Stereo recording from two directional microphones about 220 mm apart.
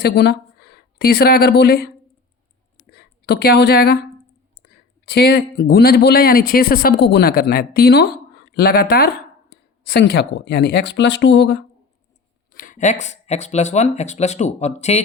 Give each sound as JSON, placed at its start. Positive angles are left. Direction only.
{"t": 0.0, "sound": "speech", "side_deg": 50}
{"t": 2.9, "sound": "a woman's voice", "side_deg": 45}
{"t": 12.5, "sound": "speech", "side_deg": 40}